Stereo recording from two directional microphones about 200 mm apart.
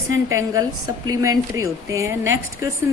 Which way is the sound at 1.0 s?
20° right (ahead or behind).